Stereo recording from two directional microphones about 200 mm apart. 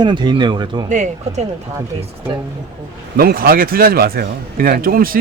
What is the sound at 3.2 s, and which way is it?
A man's voice, 50° right (ahead or behind).